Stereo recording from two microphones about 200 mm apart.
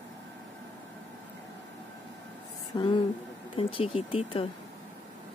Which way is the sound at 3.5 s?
30° left (ahead or behind).